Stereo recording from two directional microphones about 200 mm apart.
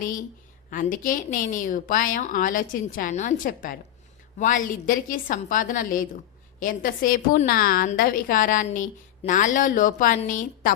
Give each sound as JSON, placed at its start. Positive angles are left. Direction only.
{"t": 0.0, "sound": "a woman's voice", "side_deg": 40}